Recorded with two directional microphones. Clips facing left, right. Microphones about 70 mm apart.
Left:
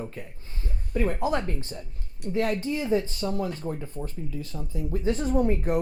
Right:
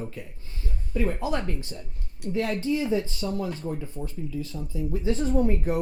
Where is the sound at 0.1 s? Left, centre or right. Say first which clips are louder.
Even; left.